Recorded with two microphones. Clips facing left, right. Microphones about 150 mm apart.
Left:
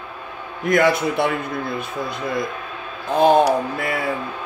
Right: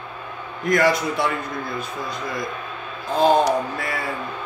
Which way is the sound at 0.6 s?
55° left (ahead or behind).